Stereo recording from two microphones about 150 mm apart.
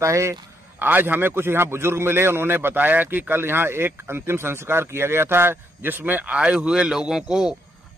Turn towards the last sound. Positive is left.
turn(degrees=-5)  # may be behind; listen again after turning